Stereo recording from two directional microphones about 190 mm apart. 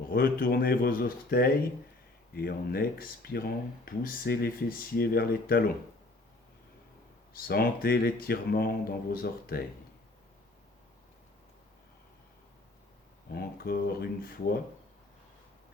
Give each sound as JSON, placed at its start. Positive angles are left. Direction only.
{"t": 0.1, "sound": "speech", "side_deg": 50}
{"t": 7.3, "sound": "speech", "side_deg": 55}
{"t": 13.3, "sound": "speech", "side_deg": 55}